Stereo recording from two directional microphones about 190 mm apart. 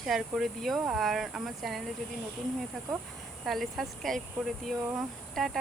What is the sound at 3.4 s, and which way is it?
Speech, centre (ahead or behind).